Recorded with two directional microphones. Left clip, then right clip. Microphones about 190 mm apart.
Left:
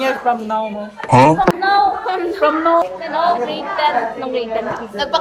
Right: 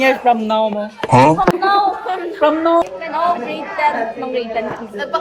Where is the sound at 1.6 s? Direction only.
20° right (ahead or behind).